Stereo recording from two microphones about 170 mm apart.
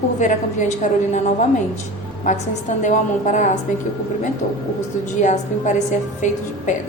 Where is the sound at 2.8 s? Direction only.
45° left (ahead or behind).